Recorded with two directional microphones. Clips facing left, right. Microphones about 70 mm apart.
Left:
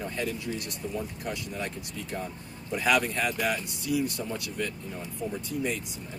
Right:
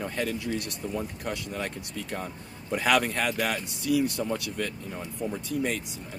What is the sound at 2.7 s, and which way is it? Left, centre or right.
Speech, right.